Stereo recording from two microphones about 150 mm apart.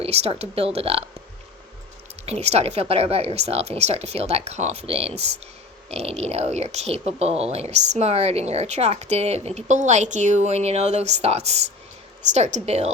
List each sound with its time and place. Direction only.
0.0 s speech: 45° right (ahead or behind)
2.2 s speech: 45° right (ahead or behind)